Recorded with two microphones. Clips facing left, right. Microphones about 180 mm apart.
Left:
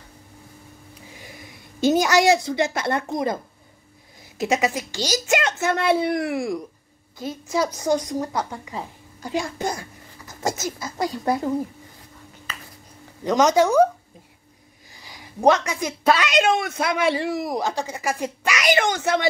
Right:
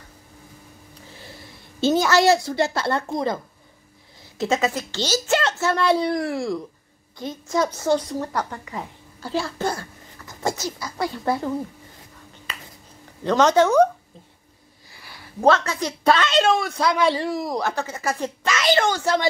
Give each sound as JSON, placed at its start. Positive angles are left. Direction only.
{"t": 1.1, "sound": "a woman's voice", "side_deg": 15}
{"t": 4.4, "sound": "a child's voice", "side_deg": 15}
{"t": 7.2, "sound": "a woman's voice", "side_deg": 5}
{"t": 13.2, "sound": "a child's voice", "side_deg": 10}
{"t": 14.9, "sound": "a woman's voice", "side_deg": 15}